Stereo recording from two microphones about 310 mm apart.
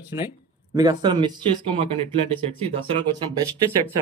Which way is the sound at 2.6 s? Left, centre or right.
Centre.